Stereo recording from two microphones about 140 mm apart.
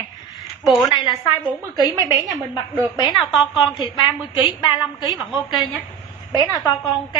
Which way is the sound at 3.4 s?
35° left (ahead or behind).